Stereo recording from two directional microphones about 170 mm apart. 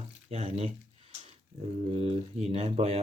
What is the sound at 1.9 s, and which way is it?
Speech, 40° right (ahead or behind).